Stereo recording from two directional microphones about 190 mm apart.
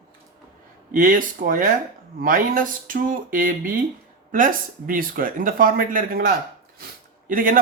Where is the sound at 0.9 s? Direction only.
45° right (ahead or behind).